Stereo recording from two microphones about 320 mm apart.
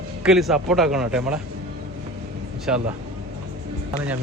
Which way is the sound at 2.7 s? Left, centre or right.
Centre.